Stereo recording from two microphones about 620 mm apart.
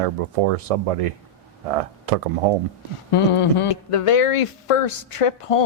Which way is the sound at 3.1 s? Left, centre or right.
Left.